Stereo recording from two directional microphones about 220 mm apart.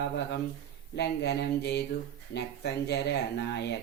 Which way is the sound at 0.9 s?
50° left (ahead or behind).